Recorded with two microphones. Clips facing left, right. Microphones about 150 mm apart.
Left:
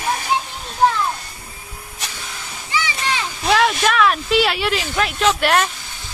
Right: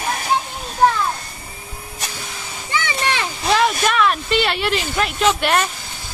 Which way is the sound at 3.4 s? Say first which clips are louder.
Left 1 dB; centre (ahead or behind).